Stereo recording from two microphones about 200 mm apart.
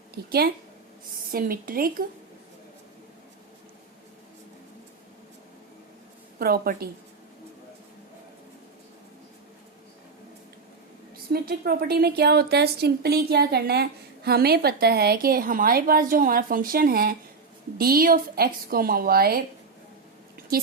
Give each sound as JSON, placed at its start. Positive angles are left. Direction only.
{"t": 0.1, "sound": "a woman's voice", "side_deg": -50}
{"t": 6.4, "sound": "a woman's voice", "side_deg": -50}
{"t": 11.3, "sound": "a woman's voice", "side_deg": -50}